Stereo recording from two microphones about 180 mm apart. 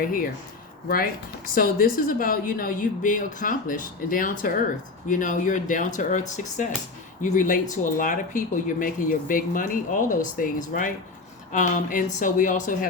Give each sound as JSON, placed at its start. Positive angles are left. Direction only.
{"t": 0.0, "sound": "speech", "side_deg": 50}